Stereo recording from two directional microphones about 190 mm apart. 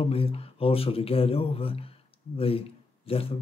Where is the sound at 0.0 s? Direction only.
30° left (ahead or behind).